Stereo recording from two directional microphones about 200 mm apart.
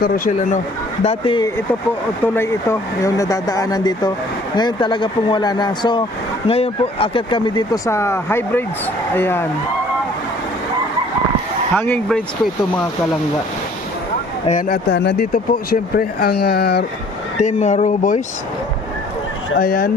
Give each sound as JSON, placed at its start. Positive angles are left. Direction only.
{"t": 0.0, "sound": "speech", "side_deg": 40}
{"t": 1.0, "sound": "speech", "side_deg": 25}
{"t": 2.2, "sound": "speech", "side_deg": 10}
{"t": 11.7, "sound": "speech", "side_deg": 10}
{"t": 14.7, "sound": "speech", "side_deg": 55}
{"t": 17.3, "sound": "speech", "side_deg": 35}
{"t": 19.5, "sound": "speech", "side_deg": 50}